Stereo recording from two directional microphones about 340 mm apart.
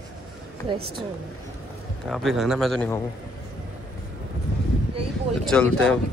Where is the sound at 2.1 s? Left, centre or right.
Centre.